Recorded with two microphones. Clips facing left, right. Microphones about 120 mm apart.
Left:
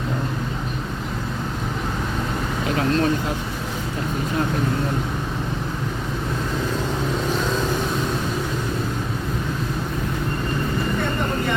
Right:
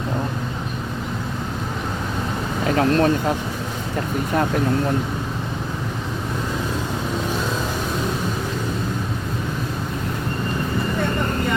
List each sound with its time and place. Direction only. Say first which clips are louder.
2.6 s speech: right 4 dB; 45° right (ahead or behind)